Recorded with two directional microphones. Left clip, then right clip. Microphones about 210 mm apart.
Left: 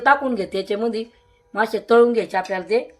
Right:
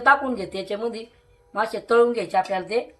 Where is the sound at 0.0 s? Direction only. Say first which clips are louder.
Left 1 dB; 55° left (ahead or behind).